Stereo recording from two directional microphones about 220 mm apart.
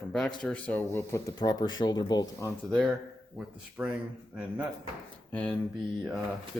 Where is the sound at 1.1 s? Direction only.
15° left (ahead or behind).